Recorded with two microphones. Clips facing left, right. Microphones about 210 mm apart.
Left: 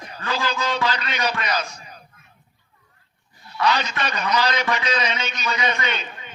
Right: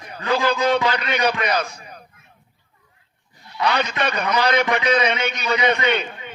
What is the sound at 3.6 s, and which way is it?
A man's voice, 60° right (ahead or behind).